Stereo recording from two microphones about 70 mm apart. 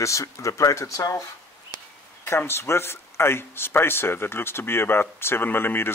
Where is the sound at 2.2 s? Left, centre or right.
Left.